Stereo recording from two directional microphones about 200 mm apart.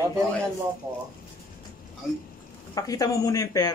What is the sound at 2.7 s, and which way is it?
Speech, 20° left (ahead or behind).